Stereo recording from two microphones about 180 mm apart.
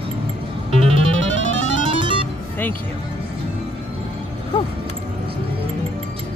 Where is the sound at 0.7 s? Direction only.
35° right (ahead or behind).